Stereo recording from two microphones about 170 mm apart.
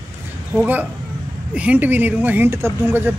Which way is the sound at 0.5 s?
10° right (ahead or behind).